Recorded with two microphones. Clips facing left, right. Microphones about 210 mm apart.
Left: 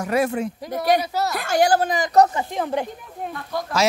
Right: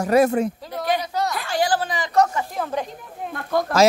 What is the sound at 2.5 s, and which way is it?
Speech, 20° left (ahead or behind).